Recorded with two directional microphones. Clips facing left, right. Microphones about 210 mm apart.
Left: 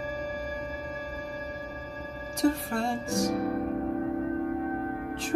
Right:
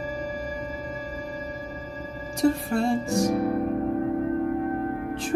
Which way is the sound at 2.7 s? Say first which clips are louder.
Right 6 dB; 20° right (ahead or behind).